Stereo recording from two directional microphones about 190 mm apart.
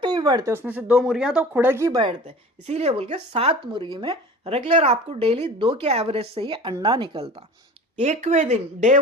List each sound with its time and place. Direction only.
0.0 s speech: 20° right (ahead or behind)
7.9 s speech: 35° right (ahead or behind)